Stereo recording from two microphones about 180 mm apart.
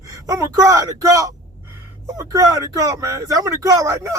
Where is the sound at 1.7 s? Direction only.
15° right (ahead or behind).